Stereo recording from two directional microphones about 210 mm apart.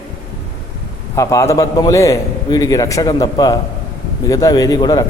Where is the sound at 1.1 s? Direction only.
15° left (ahead or behind).